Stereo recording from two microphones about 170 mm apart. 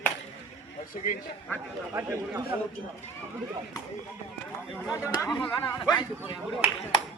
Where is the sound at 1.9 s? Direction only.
15° right (ahead or behind).